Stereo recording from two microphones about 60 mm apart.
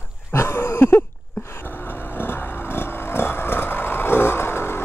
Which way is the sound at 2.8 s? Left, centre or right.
Left.